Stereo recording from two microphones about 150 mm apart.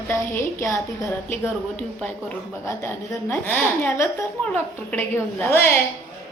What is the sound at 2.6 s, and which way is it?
Speech, 20° left (ahead or behind).